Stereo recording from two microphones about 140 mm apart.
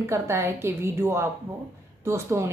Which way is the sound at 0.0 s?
20° right (ahead or behind).